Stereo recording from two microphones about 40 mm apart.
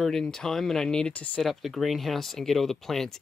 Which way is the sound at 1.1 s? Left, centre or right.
Left.